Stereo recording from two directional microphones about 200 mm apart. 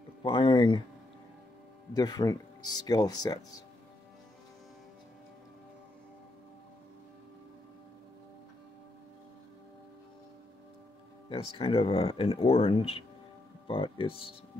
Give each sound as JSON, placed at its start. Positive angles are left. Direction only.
{"t": 0.2, "sound": "speech", "side_deg": 25}
{"t": 2.0, "sound": "speech", "side_deg": 20}
{"t": 11.2, "sound": "speech", "side_deg": 25}